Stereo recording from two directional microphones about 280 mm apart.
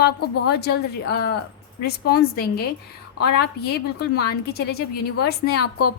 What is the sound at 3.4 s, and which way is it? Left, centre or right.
A woman's voice, left.